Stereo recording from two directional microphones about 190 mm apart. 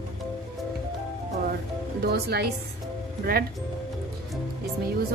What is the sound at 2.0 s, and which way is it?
Speech, 55° right (ahead or behind).